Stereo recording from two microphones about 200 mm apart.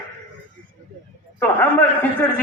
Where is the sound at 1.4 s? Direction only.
10° left (ahead or behind).